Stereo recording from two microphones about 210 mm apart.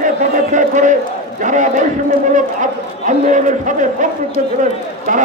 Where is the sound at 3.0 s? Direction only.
35° right (ahead or behind).